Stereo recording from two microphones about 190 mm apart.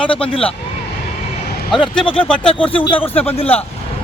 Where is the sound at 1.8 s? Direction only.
25° left (ahead or behind).